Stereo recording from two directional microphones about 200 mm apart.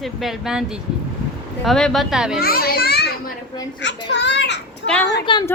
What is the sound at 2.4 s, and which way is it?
A child's voice, 50° left (ahead or behind).